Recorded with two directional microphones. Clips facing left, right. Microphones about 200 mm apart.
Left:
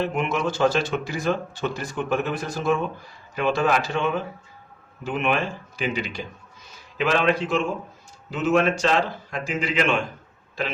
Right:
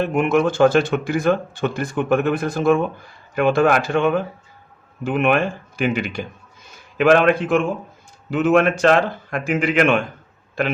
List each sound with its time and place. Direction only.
0.0 s a man's voice: 50° right (ahead or behind)